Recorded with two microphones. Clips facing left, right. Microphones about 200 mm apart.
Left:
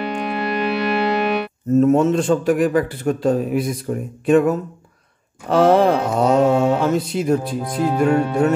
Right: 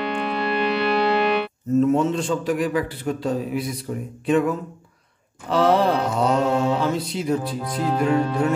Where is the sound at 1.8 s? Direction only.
45° left (ahead or behind).